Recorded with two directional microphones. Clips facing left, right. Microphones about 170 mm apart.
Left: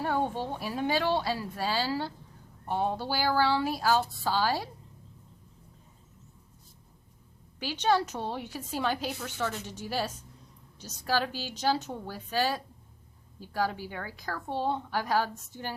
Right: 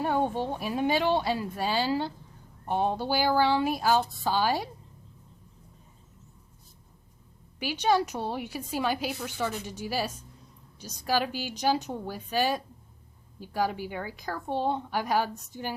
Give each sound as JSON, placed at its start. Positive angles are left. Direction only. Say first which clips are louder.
{"t": 0.0, "sound": "a woman's voice", "louder": "right 3 dB", "side_deg": -15}
{"t": 7.6, "sound": "a woman's voice", "louder": "right 2 dB", "side_deg": -15}